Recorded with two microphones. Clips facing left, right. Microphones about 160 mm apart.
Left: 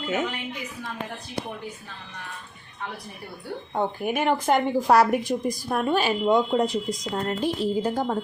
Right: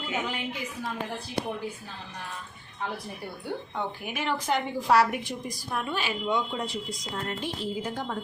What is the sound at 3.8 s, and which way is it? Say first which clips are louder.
A woman's voice: left 12 dB; 50° left (ahead or behind).